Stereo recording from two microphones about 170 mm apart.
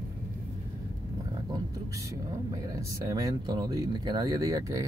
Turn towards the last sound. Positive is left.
turn(degrees=-20)  # may be behind; listen again after turning